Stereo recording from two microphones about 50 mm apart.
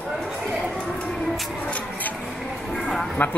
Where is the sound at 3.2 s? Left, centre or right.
Left.